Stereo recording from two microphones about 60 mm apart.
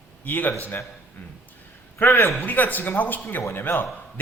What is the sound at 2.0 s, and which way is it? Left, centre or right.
A man's voice, left.